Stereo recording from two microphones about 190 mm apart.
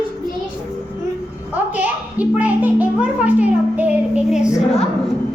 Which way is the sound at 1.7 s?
10° right (ahead or behind).